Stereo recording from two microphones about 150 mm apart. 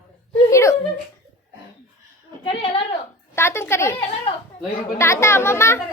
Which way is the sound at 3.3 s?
15° left (ahead or behind).